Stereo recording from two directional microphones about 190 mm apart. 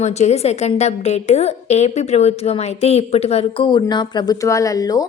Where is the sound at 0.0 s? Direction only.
35° left (ahead or behind); by 5.0 s 20° left (ahead or behind).